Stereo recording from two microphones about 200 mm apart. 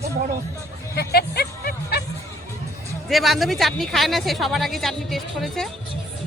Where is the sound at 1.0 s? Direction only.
50° left (ahead or behind).